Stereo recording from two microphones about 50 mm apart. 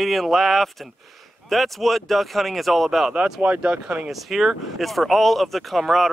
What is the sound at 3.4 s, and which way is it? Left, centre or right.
Speech, right.